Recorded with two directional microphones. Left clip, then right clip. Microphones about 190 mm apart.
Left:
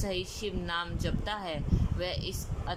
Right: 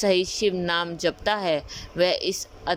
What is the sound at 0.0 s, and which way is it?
Speech, 35° right (ahead or behind).